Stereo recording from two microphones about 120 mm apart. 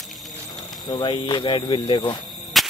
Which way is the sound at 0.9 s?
40° left (ahead or behind).